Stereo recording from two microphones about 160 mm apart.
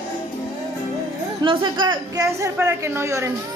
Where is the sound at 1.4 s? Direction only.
30° right (ahead or behind).